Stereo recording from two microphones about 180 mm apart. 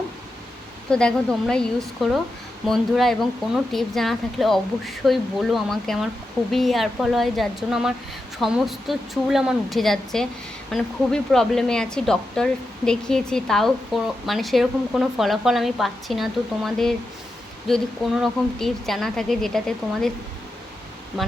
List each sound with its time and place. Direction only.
0.9 s a woman's voice: 5° left (ahead or behind)